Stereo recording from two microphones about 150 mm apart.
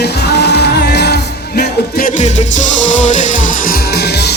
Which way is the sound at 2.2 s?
55° left (ahead or behind).